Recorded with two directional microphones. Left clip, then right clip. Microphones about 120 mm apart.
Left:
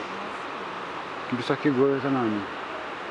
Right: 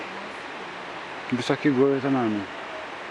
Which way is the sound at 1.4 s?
35° right (ahead or behind).